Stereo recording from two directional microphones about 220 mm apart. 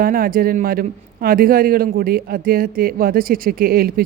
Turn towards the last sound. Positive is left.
turn(degrees=-40)  # may be behind; listen again after turning